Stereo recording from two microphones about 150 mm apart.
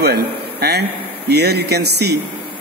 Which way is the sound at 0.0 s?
90° right.